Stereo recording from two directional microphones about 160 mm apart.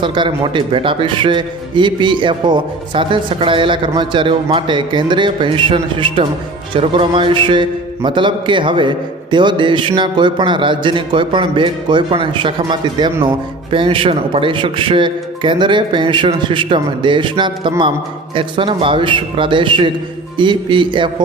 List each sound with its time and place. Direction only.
0.0 s a man's voice: 30° right (ahead or behind)